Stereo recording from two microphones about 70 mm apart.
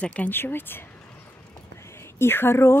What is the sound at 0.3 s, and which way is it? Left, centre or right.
Speech, left.